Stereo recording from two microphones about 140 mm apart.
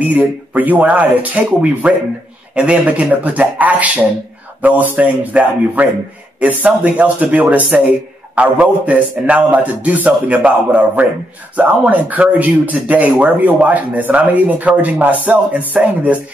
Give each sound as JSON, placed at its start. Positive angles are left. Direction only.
{"t": 0.0, "sound": "speech", "side_deg": -10}